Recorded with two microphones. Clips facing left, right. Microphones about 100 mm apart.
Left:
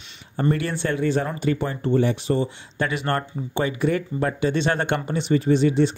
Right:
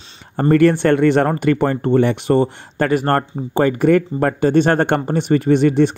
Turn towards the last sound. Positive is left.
turn(degrees=-60)  # may be behind; listen again after turning